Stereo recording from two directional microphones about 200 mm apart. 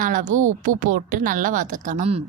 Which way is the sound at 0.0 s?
40° right (ahead or behind).